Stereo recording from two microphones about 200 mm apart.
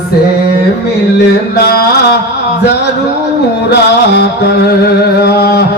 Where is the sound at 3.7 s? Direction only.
55° left (ahead or behind).